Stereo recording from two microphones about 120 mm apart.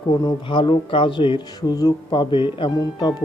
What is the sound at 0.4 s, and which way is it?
Speech, 40° left (ahead or behind).